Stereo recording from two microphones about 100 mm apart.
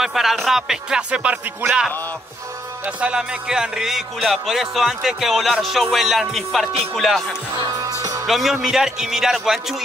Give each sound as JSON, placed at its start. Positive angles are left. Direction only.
{"t": 0.0, "sound": "speech", "side_deg": -5}
{"t": 2.8, "sound": "speech", "side_deg": -10}
{"t": 7.5, "sound": "music", "side_deg": -35}
{"t": 8.3, "sound": "speech", "side_deg": -5}